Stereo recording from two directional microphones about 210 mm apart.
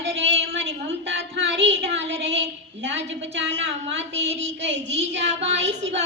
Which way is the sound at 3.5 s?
55° right (ahead or behind).